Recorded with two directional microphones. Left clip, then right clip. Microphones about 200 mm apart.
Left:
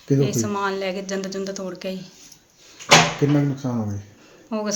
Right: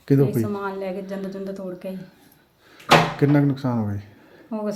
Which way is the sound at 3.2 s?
15° right (ahead or behind).